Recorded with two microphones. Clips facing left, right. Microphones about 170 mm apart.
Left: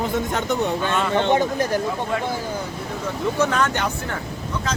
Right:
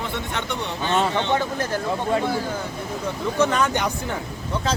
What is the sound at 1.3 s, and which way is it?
Speech, 15° left (ahead or behind).